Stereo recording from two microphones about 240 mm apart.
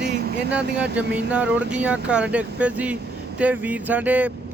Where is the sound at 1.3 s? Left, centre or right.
Centre.